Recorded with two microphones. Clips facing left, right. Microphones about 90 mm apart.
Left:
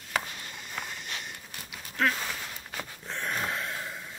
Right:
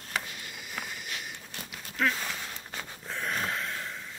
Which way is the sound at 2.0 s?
Centre (ahead or behind).